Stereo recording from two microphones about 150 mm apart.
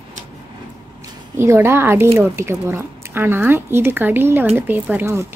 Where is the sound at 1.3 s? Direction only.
15° right (ahead or behind).